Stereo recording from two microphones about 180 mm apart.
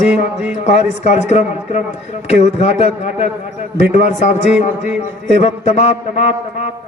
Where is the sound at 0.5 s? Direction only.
40° left (ahead or behind).